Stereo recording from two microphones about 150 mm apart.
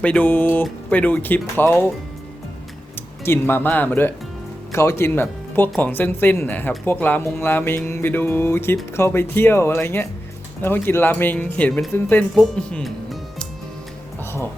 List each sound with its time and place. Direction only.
0.0 s speech: 10° left (ahead or behind)
3.2 s speech: 15° left (ahead or behind)